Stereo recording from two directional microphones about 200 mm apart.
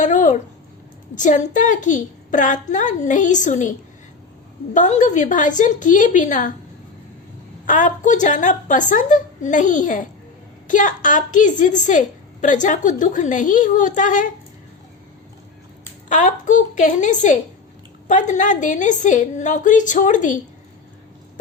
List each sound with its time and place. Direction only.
0.0 s a sound: 40° left (ahead or behind)
1.1 s a woman's voice: 40° left (ahead or behind)
7.6 s a woman's voice: 40° left (ahead or behind)
16.0 s a woman's voice: 40° left (ahead or behind)